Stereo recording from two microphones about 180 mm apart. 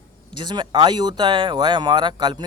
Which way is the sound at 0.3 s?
25° right (ahead or behind).